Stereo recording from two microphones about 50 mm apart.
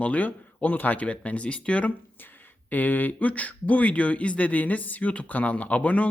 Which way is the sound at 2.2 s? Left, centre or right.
Left.